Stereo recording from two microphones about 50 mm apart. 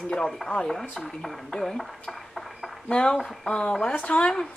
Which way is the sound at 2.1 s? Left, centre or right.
Centre.